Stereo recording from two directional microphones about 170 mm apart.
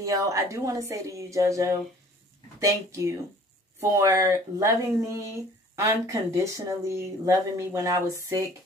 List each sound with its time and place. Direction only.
0.0 s speech: 20° right (ahead or behind)